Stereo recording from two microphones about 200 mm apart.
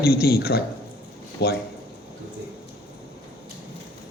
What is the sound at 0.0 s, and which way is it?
A man's voice, 50° left (ahead or behind).